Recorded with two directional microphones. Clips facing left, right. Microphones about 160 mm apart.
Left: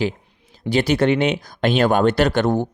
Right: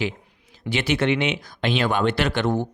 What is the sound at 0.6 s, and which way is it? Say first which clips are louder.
Speech: left 5 dB; 35° left (ahead or behind).